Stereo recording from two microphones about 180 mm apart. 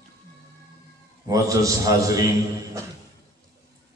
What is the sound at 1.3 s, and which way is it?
A man's voice, 20° right (ahead or behind).